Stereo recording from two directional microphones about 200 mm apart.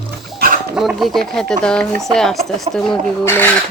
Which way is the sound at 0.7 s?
Centre (ahead or behind).